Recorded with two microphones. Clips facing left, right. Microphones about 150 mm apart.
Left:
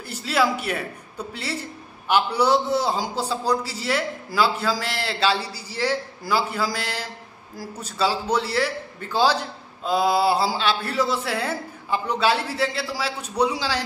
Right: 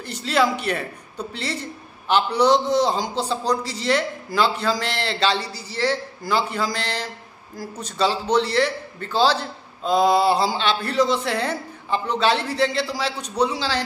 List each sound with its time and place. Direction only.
0.0 s a man's voice: 5° left (ahead or behind)